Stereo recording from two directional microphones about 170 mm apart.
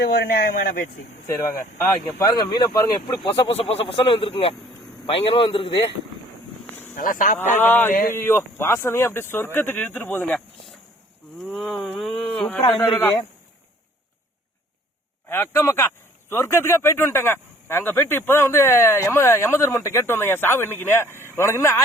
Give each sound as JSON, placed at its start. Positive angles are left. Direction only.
{"t": 0.0, "sound": "speech", "side_deg": 60}
{"t": 2.1, "sound": "a man's voice", "side_deg": 25}
{"t": 6.9, "sound": "speech", "side_deg": 55}
{"t": 7.6, "sound": "speech", "side_deg": 10}
{"t": 11.4, "sound": "a sound", "side_deg": -5}
{"t": 12.5, "sound": "a man's voice", "side_deg": 35}
{"t": 12.9, "sound": "speech", "side_deg": 10}
{"t": 15.3, "sound": "speech", "side_deg": 15}